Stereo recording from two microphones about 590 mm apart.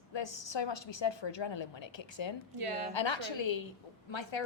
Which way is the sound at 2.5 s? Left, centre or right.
Right.